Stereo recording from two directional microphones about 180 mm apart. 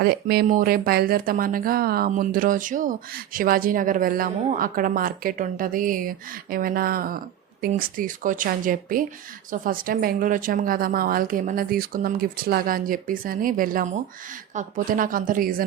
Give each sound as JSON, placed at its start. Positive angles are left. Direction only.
{"t": 0.0, "sound": "speech", "side_deg": -60}